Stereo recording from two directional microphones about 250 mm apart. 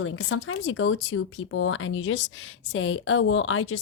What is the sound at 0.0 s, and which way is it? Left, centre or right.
Speech, left.